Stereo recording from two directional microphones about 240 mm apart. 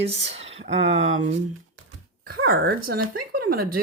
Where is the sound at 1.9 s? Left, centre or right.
Right.